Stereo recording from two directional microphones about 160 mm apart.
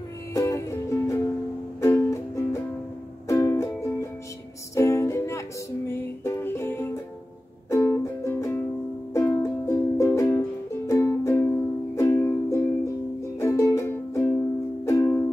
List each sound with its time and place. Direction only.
0.3 s music: 20° left (ahead or behind)